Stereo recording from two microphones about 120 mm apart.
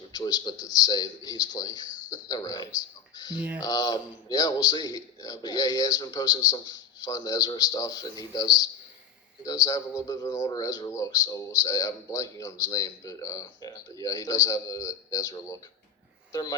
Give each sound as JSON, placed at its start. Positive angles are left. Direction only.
{"t": 0.1, "sound": "a man's voice", "side_deg": 35}